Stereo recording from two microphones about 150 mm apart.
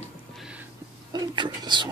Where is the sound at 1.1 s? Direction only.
30° right (ahead or behind).